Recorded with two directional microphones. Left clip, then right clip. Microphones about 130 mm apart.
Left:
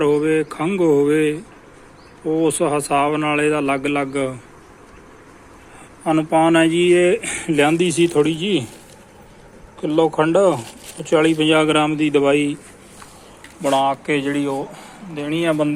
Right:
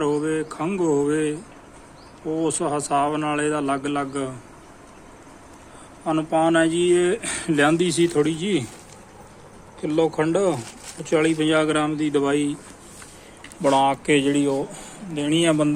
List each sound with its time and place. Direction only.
0.0 s a man's voice: 25° left (ahead or behind)
6.1 s a man's voice: 20° left (ahead or behind)
7.3 s a man's voice: 15° right (ahead or behind)
9.8 s a man's voice: 5° right (ahead or behind)
13.6 s speech: 30° right (ahead or behind)